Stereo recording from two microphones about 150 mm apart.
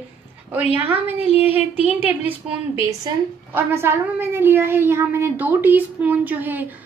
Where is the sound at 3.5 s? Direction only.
15° right (ahead or behind).